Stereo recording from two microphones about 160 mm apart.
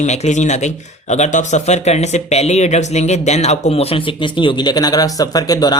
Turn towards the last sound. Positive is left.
turn(degrees=25)  # may be behind; listen again after turning